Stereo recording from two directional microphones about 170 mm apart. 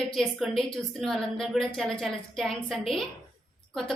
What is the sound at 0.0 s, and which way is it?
A woman's voice, centre (ahead or behind).